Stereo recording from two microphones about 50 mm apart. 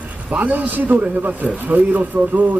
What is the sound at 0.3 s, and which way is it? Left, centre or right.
Speech, right.